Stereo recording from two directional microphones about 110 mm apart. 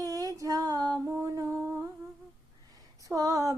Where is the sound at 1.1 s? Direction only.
25° right (ahead or behind).